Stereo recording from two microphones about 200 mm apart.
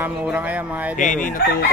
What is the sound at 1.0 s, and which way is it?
Speech, 40° left (ahead or behind).